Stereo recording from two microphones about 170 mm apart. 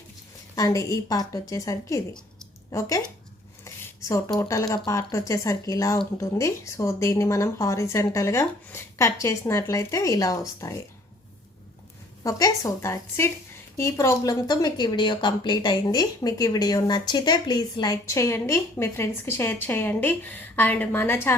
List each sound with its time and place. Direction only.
0.5 s a woman's voice: 20° left (ahead or behind)
4.1 s speech: 15° left (ahead or behind)
12.2 s a woman's voice: 20° left (ahead or behind)